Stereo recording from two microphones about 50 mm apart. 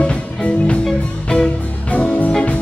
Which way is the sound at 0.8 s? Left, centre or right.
Centre.